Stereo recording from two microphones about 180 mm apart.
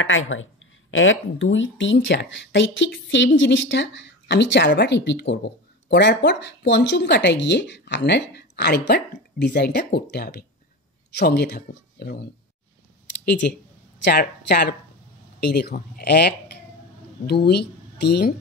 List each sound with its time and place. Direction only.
0.0 s speech: 90° left; by 12.2 s 60° left (ahead or behind)
13.2 s speech: 65° left (ahead or behind)